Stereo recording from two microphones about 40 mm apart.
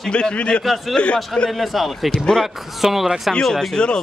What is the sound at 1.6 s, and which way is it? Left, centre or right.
Speech, centre.